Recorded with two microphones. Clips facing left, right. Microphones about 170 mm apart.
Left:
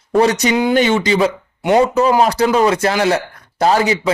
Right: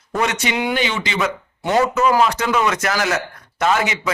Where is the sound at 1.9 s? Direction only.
35° left (ahead or behind).